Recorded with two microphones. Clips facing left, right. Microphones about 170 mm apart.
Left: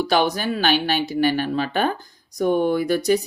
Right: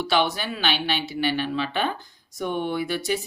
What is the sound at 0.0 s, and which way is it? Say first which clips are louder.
Speech: left 4 dB; 40° left (ahead or behind).